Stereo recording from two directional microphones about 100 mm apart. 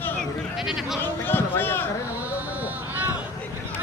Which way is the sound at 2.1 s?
15° right (ahead or behind).